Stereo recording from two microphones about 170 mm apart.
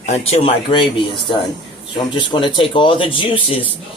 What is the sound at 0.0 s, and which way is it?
Speech, 40° left (ahead or behind).